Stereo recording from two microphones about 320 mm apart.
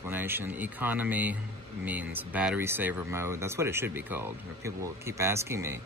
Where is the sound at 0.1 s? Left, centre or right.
Centre.